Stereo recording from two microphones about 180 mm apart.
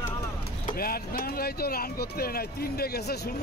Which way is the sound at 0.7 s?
55° left (ahead or behind).